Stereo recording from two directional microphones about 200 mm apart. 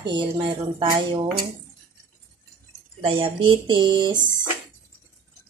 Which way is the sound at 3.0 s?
25° right (ahead or behind).